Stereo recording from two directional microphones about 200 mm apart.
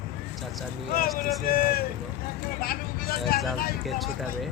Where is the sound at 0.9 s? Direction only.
50° left (ahead or behind).